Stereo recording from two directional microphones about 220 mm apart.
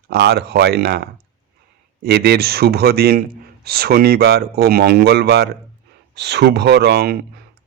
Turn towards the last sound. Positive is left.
turn(degrees=-45)  # may be behind; listen again after turning